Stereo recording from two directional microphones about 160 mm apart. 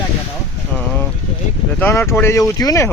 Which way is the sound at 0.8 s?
10° left (ahead or behind).